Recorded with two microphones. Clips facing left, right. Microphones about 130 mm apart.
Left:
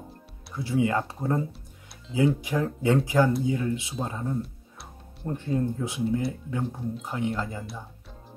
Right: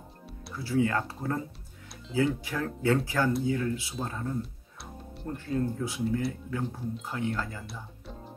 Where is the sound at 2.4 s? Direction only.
15° left (ahead or behind).